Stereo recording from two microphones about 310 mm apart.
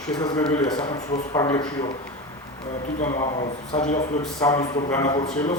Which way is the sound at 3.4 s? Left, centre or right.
Left.